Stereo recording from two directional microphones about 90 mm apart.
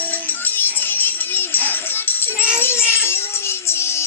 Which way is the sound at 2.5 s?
25° left (ahead or behind).